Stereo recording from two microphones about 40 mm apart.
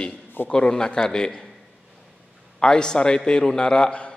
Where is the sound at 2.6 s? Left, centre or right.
Left.